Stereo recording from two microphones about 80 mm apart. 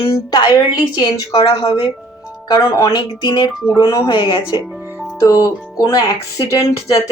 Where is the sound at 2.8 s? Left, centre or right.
Left.